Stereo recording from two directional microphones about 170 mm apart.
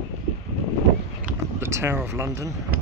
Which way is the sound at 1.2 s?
15° right (ahead or behind).